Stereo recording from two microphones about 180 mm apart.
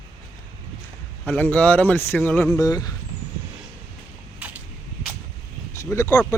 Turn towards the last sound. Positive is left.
turn(degrees=15)  # may be behind; listen again after turning